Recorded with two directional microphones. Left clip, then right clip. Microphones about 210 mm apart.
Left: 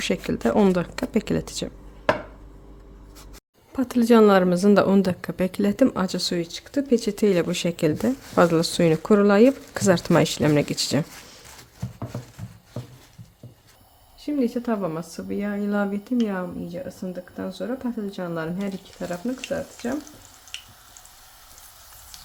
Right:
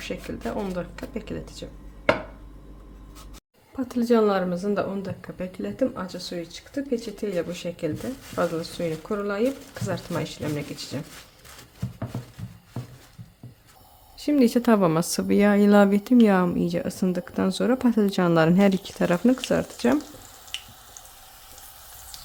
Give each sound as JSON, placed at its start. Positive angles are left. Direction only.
{"t": 0.0, "sound": "speech", "side_deg": 50}
{"t": 3.8, "sound": "speech", "side_deg": 35}
{"t": 14.2, "sound": "speech", "side_deg": -30}